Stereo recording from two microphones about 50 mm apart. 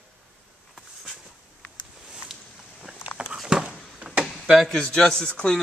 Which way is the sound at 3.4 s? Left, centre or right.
Centre.